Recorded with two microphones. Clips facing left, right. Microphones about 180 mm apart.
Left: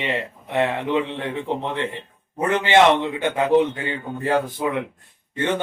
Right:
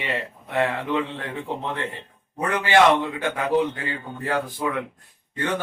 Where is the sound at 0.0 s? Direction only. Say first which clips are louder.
Left 3 dB; 20° left (ahead or behind).